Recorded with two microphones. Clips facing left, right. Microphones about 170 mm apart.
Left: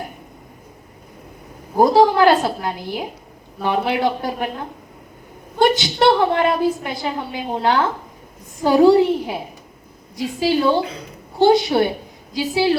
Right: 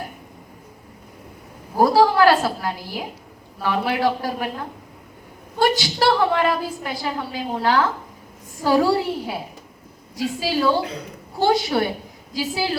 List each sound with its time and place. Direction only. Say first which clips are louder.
1.7 s a woman's voice: left 3 dB; 20° left (ahead or behind)
5.5 s a woman's voice: left 3 dB; 20° left (ahead or behind)
10.4 s a woman's voice: left 4 dB; 25° left (ahead or behind)